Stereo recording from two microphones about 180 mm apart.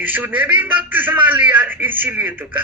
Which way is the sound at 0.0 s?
10° right (ahead or behind).